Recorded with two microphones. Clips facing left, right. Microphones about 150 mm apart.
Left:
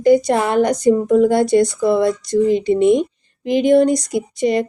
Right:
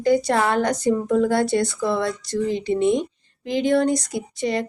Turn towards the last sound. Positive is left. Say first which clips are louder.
# left 7 dB
turn(degrees=15)  # may be behind; listen again after turning